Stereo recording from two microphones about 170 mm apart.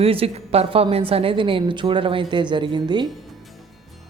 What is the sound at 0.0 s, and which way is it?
A woman's voice, 35° right (ahead or behind).